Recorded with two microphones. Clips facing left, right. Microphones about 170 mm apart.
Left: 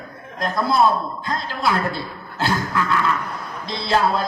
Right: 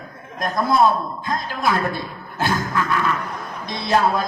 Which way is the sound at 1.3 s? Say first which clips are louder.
Right 1 dB; 15° right (ahead or behind).